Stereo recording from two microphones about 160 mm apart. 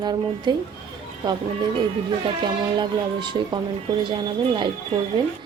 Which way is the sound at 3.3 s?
35° right (ahead or behind).